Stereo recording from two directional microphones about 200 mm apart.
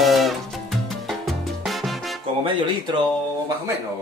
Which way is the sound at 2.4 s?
25° right (ahead or behind).